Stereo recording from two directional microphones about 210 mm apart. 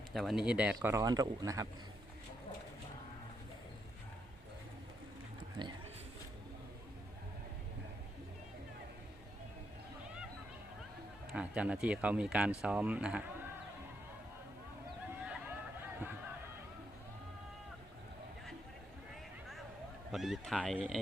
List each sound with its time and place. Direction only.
0.1 s speech: centre (ahead or behind); by 1.6 s 15° right (ahead or behind)
5.6 s speech: 20° right (ahead or behind)
11.3 s speech: 5° right (ahead or behind)
15.2 s a sound: 5° right (ahead or behind)
20.1 s speech: centre (ahead or behind)